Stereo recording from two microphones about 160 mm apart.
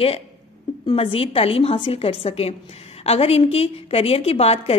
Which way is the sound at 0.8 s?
35° left (ahead or behind).